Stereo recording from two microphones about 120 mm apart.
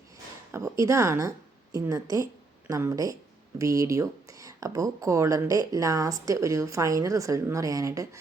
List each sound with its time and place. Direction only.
0.5 s a woman's voice: 25° right (ahead or behind)